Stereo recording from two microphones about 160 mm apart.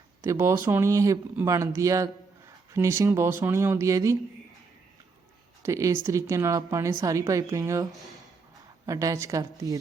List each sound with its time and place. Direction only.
0.2 s speech: 15° right (ahead or behind)
5.6 s speech: 20° right (ahead or behind)